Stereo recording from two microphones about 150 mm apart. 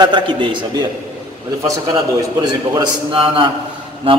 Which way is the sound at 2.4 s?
30° right (ahead or behind).